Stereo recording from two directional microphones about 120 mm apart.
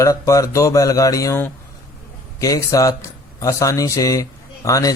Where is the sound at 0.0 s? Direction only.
30° left (ahead or behind).